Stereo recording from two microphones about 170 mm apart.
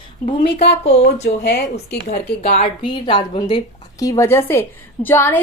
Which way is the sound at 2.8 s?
30° left (ahead or behind).